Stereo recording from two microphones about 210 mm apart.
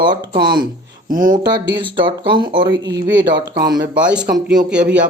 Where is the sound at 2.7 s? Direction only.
60° right (ahead or behind).